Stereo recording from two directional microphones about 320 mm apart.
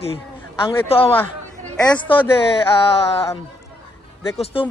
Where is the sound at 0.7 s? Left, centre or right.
Centre.